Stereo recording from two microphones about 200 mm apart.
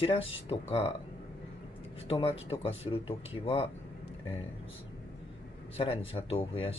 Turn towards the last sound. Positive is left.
turn(degrees=30)  # may be behind; listen again after turning